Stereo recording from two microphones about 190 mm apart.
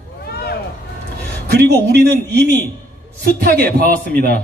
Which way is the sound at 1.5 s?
60° right (ahead or behind).